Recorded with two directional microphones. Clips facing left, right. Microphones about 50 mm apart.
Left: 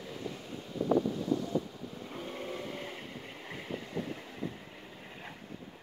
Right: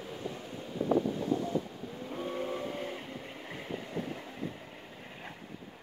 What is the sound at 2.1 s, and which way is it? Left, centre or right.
Vehicle, centre.